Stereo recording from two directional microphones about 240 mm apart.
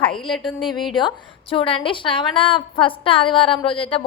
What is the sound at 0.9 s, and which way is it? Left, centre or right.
A woman's voice, left.